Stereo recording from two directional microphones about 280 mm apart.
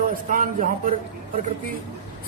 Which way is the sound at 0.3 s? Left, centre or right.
Right.